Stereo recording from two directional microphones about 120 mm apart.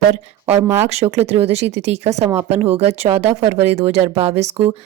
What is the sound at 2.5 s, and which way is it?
A woman's voice, 60° right (ahead or behind).